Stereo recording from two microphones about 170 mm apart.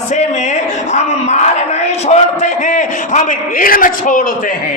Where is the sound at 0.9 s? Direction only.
40° left (ahead or behind).